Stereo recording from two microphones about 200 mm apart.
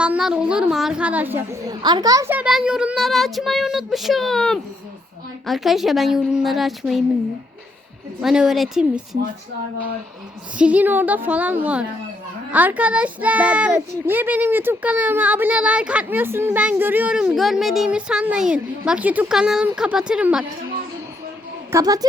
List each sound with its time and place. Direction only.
0.0 s a child's voice: 5° right (ahead or behind)
8.2 s a child's voice: centre (ahead or behind)
10.6 s a child's voice: 5° right (ahead or behind)
21.7 s a child's voice: 15° right (ahead or behind)